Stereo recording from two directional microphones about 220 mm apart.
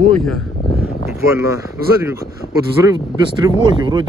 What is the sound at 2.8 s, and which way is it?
Speech, 15° right (ahead or behind).